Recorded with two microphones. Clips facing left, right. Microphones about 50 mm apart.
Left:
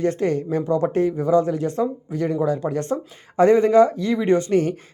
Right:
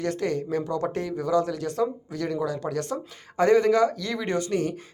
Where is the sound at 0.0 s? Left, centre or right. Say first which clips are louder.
Left 6 dB; left.